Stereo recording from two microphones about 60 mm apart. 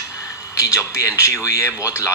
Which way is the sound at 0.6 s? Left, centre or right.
Left.